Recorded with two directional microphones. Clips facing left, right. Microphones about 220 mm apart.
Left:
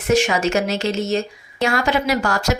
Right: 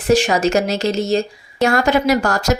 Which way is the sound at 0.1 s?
35° right (ahead or behind).